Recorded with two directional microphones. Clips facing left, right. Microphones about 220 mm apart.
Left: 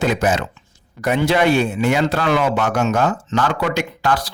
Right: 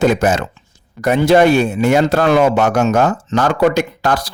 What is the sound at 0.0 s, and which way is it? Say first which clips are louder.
Speech: right 4 dB; 45° right (ahead or behind).